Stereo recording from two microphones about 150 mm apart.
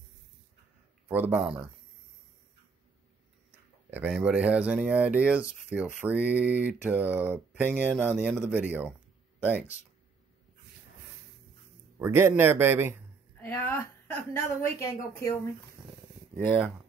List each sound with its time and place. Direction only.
1.0 s speech: 15° right (ahead or behind)
3.9 s speech: 5° right (ahead or behind)
12.0 s speech: 15° right (ahead or behind)
13.4 s a woman's voice: 15° left (ahead or behind)